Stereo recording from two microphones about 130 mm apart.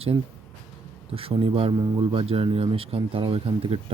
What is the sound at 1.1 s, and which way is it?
Speech, 45° right (ahead or behind).